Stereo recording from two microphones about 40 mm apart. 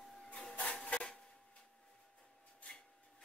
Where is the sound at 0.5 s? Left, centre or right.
Left.